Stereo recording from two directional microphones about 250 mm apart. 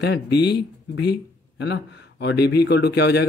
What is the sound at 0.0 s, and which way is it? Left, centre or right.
A man's voice, left.